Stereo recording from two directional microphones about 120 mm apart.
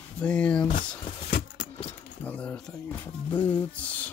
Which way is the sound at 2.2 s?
10° left (ahead or behind).